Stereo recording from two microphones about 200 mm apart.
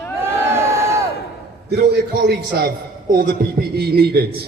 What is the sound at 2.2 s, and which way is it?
Speech, 55° right (ahead or behind).